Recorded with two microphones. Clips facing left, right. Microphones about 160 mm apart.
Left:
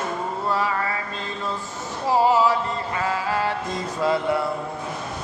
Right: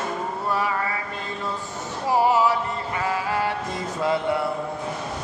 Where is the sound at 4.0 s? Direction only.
15° right (ahead or behind).